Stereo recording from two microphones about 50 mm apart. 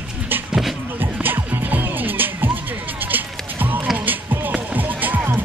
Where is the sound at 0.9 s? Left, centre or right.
Right.